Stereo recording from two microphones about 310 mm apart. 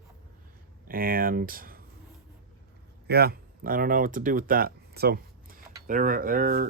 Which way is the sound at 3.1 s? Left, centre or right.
Right.